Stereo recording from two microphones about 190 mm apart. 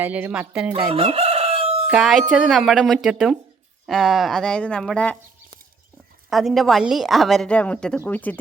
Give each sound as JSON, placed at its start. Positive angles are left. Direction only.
{"t": 0.0, "sound": "speech", "side_deg": -10}
{"t": 0.9, "sound": "crowing", "side_deg": -30}
{"t": 1.9, "sound": "a woman's voice", "side_deg": 0}
{"t": 6.3, "sound": "a woman's voice", "side_deg": 0}